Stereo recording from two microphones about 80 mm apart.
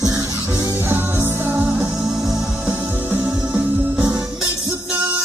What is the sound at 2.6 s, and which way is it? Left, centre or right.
Music, right.